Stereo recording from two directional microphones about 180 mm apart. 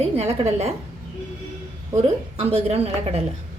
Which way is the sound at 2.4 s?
35° right (ahead or behind).